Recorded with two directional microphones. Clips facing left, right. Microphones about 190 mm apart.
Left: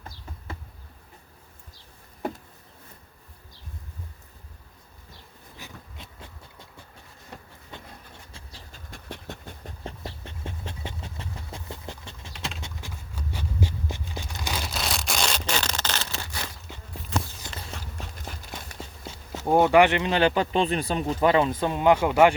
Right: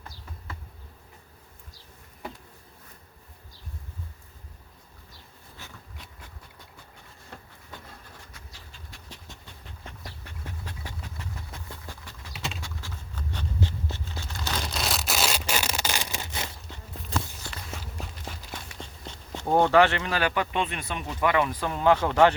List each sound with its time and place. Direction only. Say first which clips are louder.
5.5 s insect: left 3 dB; 15° left (ahead or behind)
7.3 s a sound: left 2 dB; 25° left (ahead or behind)
8.7 s dog: left 10 dB; 55° left (ahead or behind)
9.6 s dog: left 7 dB; 30° left (ahead or behind)
12.3 s typing: even; centre (ahead or behind)
12.6 s a sound: left 1 dB; 15° left (ahead or behind); by 16.5 s 20° right (ahead or behind)
17.2 s walk: left 2 dB; 30° left (ahead or behind)
17.7 s a sound: even; centre (ahead or behind)
18.8 s speech: left 2 dB; 5° left (ahead or behind)